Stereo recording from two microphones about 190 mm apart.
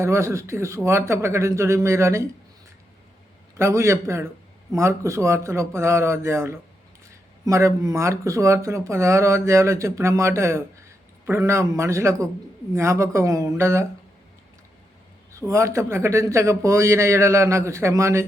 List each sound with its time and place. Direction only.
0.0 s speech: 15° right (ahead or behind)
3.6 s speech: 15° right (ahead or behind)
15.3 s speech: 15° right (ahead or behind)